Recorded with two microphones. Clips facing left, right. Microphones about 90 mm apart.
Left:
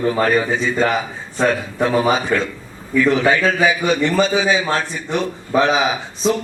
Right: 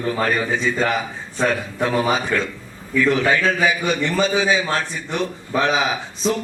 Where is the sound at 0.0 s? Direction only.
10° left (ahead or behind).